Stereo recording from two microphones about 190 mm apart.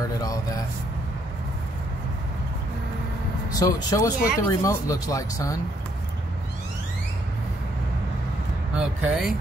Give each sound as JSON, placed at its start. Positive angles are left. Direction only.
{"t": 0.2, "sound": "a man's voice", "side_deg": 20}
{"t": 3.5, "sound": "speech", "side_deg": 15}
{"t": 8.7, "sound": "speech", "side_deg": -5}